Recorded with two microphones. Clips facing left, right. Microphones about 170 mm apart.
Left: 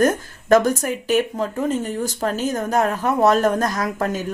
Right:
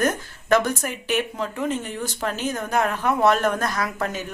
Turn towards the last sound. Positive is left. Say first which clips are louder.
# left 4 dB
turn(degrees=40)  # may be behind; listen again after turning